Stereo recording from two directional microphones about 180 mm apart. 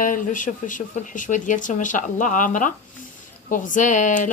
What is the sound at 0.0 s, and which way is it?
A woman's voice, 45° left (ahead or behind).